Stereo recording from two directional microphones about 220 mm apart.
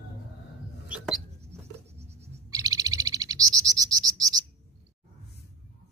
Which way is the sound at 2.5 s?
15° right (ahead or behind).